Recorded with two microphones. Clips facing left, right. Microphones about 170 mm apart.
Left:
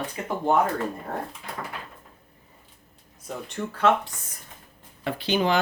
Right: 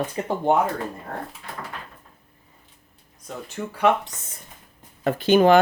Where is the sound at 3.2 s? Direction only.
10° right (ahead or behind).